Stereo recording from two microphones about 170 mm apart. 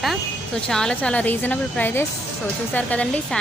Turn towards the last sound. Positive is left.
turn(degrees=10)  # may be behind; listen again after turning